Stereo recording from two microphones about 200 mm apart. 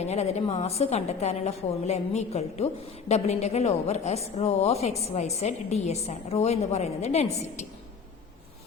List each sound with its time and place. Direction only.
0.0 s a woman's voice: 35° left (ahead or behind)